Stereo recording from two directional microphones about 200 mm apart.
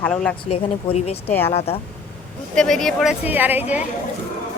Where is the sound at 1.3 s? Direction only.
10° left (ahead or behind).